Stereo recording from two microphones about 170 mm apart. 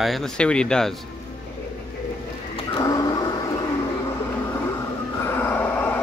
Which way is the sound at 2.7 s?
20° left (ahead or behind).